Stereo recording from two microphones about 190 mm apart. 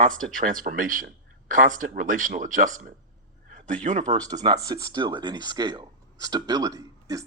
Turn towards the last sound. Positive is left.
turn(degrees=-20)  # may be behind; listen again after turning